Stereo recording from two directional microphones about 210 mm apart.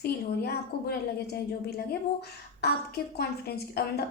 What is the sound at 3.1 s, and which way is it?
Speech, 50° left (ahead or behind).